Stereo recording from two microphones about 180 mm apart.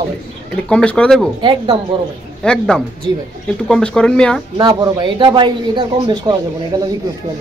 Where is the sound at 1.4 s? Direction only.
25° right (ahead or behind).